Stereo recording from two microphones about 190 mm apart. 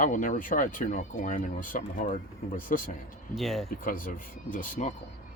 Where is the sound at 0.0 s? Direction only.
45° left (ahead or behind).